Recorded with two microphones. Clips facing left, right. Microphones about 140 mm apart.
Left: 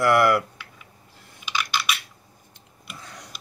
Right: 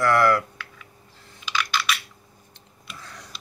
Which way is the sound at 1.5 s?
10° left (ahead or behind).